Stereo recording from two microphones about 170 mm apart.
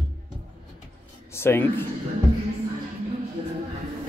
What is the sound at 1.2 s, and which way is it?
Speech, 15° left (ahead or behind).